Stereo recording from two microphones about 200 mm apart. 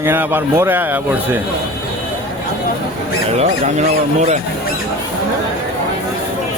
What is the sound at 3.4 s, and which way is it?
Speech, 35° right (ahead or behind).